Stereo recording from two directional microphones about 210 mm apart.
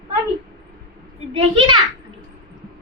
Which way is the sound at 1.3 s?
25° right (ahead or behind).